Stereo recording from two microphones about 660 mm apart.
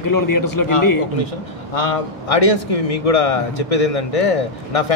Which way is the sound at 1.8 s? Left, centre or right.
Left.